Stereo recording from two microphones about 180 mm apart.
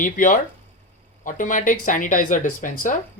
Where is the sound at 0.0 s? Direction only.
45° left (ahead or behind).